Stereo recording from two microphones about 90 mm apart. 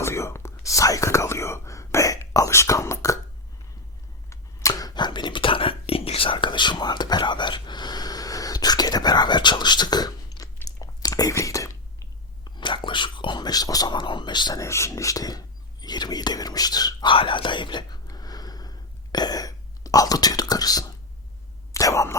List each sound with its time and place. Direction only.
0.0 s whispering: 30° left (ahead or behind)
4.7 s whispering: 55° left (ahead or behind); by 12.0 s 35° left (ahead or behind)
12.5 s whispering: 60° left (ahead or behind)
14.6 s whispering: 30° left (ahead or behind); by 17.1 s 45° left (ahead or behind)
17.1 s speech: 70° left (ahead or behind)
18.1 s a sound: 45° left (ahead or behind)
21.7 s whispering: 35° left (ahead or behind)